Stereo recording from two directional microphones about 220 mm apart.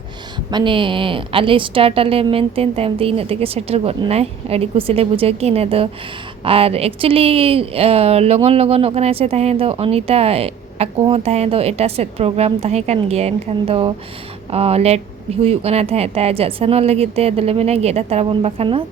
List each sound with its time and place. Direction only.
0.5 s speech: 20° right (ahead or behind)